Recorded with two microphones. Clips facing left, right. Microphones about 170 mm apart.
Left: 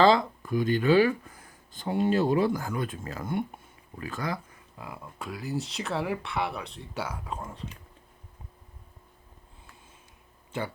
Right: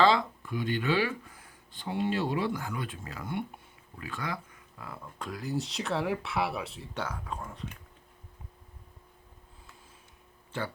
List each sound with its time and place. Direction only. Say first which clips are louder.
0.0 s speech: left 3 dB; 40° left (ahead or behind)
5.2 s speech: left 1 dB; 5° left (ahead or behind)
7.3 s speech: left 2 dB; 20° left (ahead or behind)